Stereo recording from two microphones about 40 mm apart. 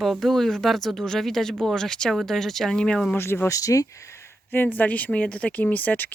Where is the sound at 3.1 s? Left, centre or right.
Left.